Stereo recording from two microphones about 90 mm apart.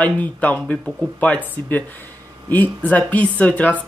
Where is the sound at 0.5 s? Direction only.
Centre (ahead or behind).